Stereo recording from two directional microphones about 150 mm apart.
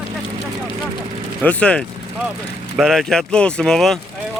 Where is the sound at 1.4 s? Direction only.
10° left (ahead or behind).